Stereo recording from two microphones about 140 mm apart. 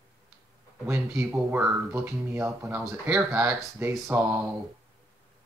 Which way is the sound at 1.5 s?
20° right (ahead or behind).